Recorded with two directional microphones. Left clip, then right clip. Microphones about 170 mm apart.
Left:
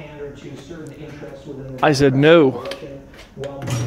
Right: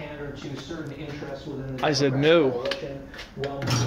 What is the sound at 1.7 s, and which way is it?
Speech, 65° left (ahead or behind).